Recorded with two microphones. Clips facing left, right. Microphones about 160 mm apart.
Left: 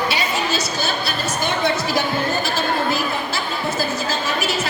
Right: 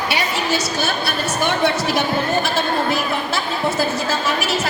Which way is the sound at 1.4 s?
65° right (ahead or behind).